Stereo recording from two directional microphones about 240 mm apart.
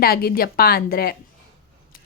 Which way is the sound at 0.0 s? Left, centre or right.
Left.